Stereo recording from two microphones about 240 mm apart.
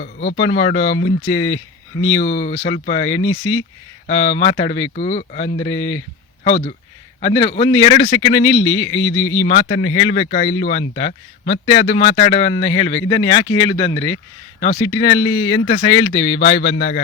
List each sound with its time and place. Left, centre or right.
0.0 s speech: left
1.3 s speech: left
2.2 s speech: left
3.1 s a man's voice: left
4.0 s speech: left
5.7 s a man's voice: left
6.4 s speech: left
8.4 s a man's voice: left
9.5 s speech: left
12.5 s speech: left
14.8 s a man's voice: left
15.8 s speech: centre
16.4 s speech: left